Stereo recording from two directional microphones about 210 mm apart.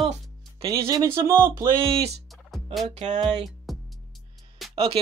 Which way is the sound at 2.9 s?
35° right (ahead or behind).